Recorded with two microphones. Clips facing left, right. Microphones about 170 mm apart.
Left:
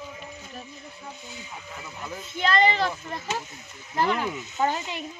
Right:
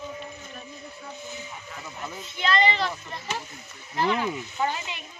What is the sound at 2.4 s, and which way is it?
Speech, 45° left (ahead or behind).